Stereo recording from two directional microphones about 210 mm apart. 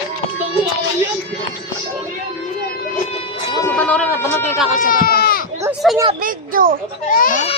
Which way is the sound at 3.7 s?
5° left (ahead or behind).